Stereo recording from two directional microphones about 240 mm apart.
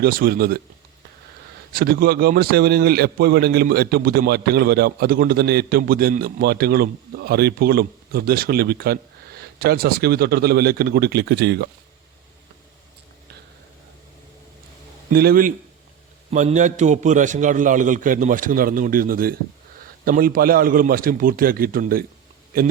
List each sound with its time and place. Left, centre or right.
0.0 s a man's voice: right
1.7 s a man's voice: right
15.1 s a man's voice: right